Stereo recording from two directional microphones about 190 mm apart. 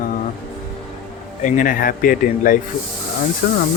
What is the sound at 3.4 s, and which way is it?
Speech, 60° left (ahead or behind).